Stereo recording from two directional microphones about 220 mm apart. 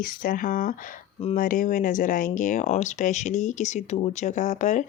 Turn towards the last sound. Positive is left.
turn(degrees=35)  # may be behind; listen again after turning